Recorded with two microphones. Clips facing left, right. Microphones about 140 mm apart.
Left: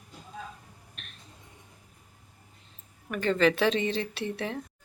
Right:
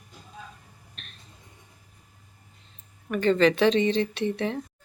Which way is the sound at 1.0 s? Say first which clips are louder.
Right 1 dB; 10° left (ahead or behind).